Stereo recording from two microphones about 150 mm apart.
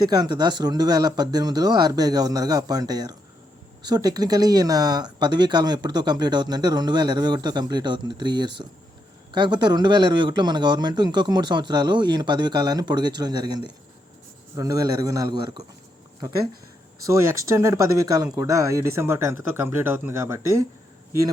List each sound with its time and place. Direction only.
0.1 s speech: 30° right (ahead or behind)
17.1 s speech: 20° right (ahead or behind)